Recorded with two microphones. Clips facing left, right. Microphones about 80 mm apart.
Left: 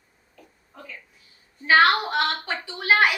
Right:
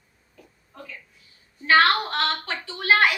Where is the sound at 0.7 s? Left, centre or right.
Centre.